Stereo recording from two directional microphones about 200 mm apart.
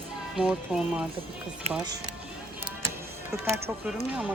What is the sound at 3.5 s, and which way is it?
Speech, 10° right (ahead or behind).